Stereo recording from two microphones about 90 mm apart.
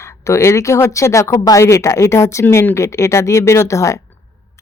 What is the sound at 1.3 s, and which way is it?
Speech, 45° left (ahead or behind).